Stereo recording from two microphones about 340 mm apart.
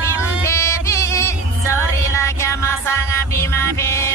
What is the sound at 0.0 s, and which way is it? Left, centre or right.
Music, centre.